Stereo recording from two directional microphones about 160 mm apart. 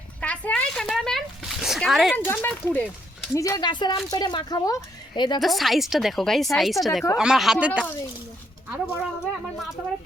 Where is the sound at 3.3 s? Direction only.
20° left (ahead or behind).